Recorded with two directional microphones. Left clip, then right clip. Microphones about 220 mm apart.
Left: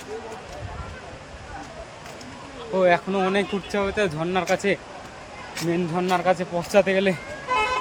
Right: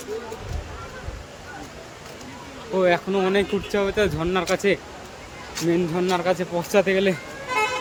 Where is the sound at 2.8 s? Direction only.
10° right (ahead or behind).